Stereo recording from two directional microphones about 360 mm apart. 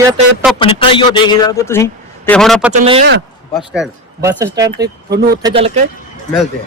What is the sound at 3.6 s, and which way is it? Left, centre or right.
A man's voice, centre.